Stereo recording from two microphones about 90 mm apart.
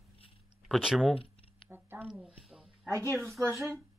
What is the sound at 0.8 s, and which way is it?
Speech, centre (ahead or behind).